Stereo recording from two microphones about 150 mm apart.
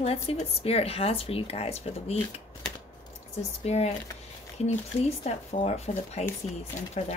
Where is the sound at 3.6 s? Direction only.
45° left (ahead or behind).